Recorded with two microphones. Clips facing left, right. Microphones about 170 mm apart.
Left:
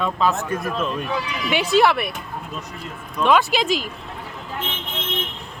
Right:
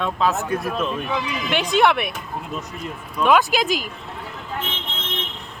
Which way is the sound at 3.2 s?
Centre (ahead or behind).